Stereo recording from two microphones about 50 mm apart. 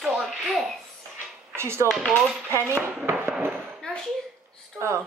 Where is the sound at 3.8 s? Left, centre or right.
Left.